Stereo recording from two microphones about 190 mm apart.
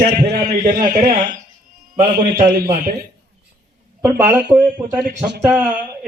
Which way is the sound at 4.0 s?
10° right (ahead or behind).